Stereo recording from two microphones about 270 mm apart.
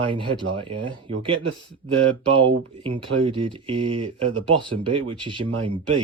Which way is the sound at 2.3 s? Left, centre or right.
Centre.